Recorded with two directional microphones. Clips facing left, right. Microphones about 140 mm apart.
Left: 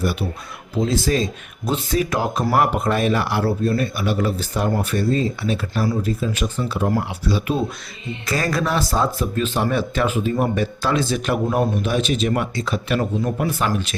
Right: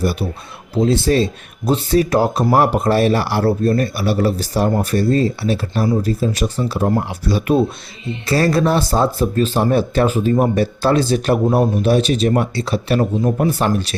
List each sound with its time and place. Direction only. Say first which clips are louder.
0.0 s speech: right 3 dB; 35° right (ahead or behind)
7.3 s speech: right 6 dB; 50° right (ahead or behind)
8.3 s speech: right 6 dB; 30° right (ahead or behind)